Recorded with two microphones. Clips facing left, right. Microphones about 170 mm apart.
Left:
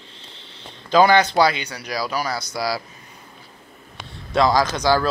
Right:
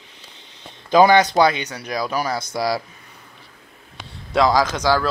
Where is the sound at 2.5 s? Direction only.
5° left (ahead or behind).